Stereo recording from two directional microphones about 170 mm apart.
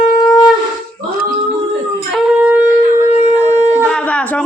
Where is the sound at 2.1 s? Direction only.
5° right (ahead or behind).